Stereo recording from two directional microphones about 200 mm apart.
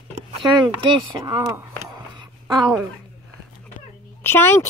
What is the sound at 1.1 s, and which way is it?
Speech, 20° right (ahead or behind).